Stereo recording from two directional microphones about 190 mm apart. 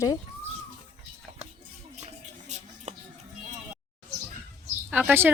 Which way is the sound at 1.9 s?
35° right (ahead or behind).